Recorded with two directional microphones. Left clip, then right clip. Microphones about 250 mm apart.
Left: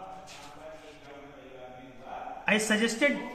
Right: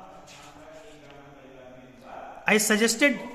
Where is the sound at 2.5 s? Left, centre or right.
Right.